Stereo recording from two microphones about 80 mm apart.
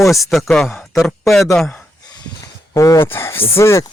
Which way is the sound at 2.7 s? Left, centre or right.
Left.